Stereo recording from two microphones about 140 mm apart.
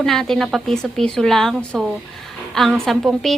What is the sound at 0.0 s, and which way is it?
A woman's voice, 5° left (ahead or behind).